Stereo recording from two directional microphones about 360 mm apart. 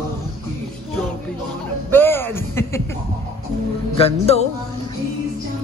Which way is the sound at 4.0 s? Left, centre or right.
Centre.